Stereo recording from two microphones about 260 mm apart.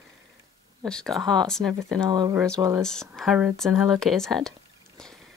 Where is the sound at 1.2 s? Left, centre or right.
Centre.